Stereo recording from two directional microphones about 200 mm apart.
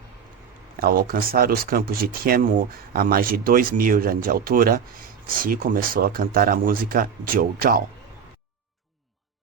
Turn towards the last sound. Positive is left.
turn(degrees=-45)  # may be behind; listen again after turning